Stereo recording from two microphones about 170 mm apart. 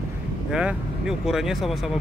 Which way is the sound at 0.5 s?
5° right (ahead or behind).